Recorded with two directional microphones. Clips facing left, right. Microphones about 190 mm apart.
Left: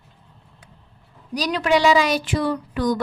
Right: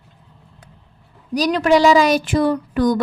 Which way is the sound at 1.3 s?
45° right (ahead or behind).